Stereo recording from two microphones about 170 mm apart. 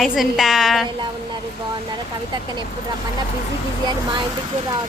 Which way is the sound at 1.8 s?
25° right (ahead or behind).